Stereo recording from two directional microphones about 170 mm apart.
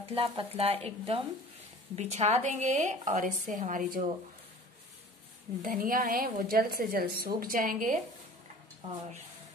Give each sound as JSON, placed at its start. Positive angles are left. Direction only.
{"t": 0.1, "sound": "speech", "side_deg": -35}
{"t": 5.6, "sound": "a woman's voice", "side_deg": -55}